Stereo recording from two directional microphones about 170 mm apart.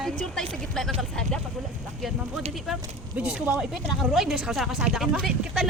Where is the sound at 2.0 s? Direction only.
Centre (ahead or behind).